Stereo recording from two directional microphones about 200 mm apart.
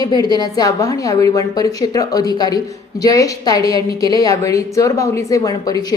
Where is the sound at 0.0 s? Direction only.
20° left (ahead or behind).